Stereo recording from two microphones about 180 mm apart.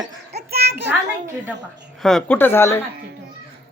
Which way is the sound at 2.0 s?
5° left (ahead or behind).